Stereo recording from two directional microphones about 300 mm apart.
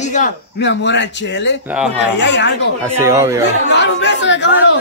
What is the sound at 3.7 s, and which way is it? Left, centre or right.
Speech, left.